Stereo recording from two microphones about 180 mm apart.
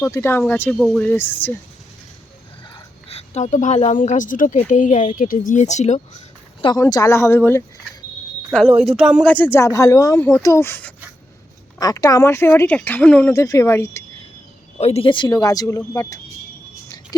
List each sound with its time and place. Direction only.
0.0 s speech: 15° left (ahead or behind)
2.6 s a woman's voice: 30° left (ahead or behind)
6.6 s speech: 25° left (ahead or behind)
8.5 s speech: centre (ahead or behind)
9.3 s speech: 10° left (ahead or behind)
14.8 s speech: 35° left (ahead or behind); by 16.2 s 20° left (ahead or behind)